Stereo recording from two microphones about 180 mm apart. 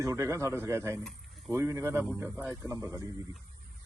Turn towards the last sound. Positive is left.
turn(degrees=-15)  # may be behind; listen again after turning